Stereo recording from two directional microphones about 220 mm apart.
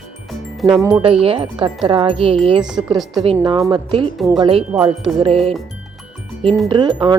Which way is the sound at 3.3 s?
20° right (ahead or behind).